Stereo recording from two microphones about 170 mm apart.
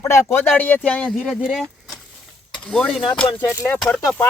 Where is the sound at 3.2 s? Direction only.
10° left (ahead or behind).